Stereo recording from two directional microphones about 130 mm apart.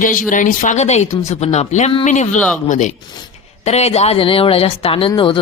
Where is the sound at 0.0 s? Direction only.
90° left; by 2.9 s 70° left (ahead or behind).